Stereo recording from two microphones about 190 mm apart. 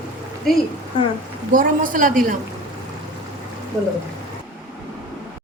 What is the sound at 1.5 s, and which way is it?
Speech, 45° right (ahead or behind).